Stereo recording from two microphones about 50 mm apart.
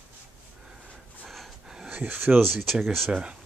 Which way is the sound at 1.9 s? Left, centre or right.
Right.